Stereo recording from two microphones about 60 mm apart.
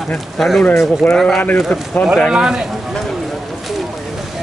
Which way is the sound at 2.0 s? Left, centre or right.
Left.